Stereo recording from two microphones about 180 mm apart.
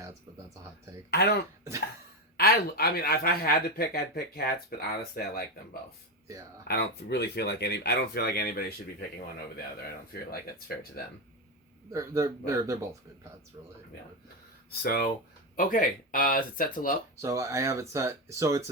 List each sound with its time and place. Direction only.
2.4 s speech: 60° left (ahead or behind)
6.7 s speech: 65° left (ahead or behind)
11.9 s speech: 15° right (ahead or behind)
14.7 s speech: 55° left (ahead or behind)
17.2 s speech: 15° right (ahead or behind)